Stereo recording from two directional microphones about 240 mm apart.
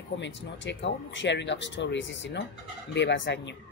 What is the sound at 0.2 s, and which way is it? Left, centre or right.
Speech, left.